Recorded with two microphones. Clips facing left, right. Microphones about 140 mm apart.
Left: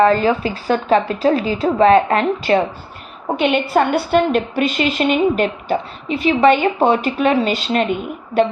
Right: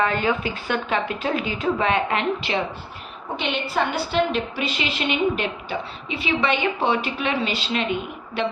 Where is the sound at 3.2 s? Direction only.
55° left (ahead or behind).